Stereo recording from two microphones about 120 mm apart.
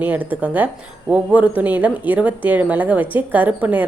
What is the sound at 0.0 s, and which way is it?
A woman's voice, 15° right (ahead or behind).